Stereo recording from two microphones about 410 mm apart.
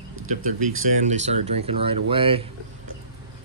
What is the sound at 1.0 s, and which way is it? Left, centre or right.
Speech, centre.